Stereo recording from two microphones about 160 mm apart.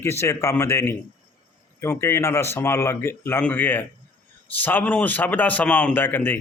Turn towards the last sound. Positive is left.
turn(degrees=10)  # may be behind; listen again after turning